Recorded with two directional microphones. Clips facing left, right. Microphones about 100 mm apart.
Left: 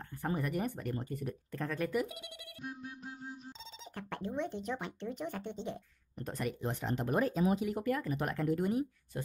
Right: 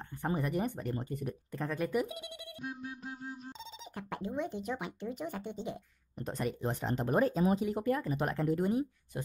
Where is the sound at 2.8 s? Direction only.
90° right.